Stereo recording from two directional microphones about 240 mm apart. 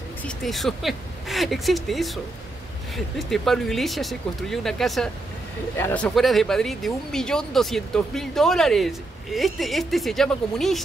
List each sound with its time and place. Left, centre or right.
0.3 s speech: centre
3.2 s speech: centre